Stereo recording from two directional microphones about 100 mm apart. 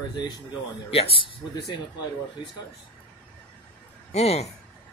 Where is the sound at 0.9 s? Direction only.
70° left (ahead or behind).